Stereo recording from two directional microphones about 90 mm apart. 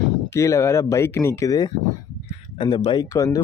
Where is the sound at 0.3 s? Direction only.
35° left (ahead or behind).